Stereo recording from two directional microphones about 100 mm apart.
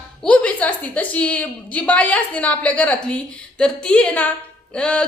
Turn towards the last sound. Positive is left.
turn(degrees=10)  # may be behind; listen again after turning